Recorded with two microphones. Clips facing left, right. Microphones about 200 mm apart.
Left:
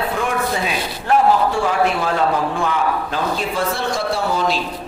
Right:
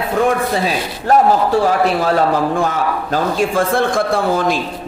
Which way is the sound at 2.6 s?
45° right (ahead or behind).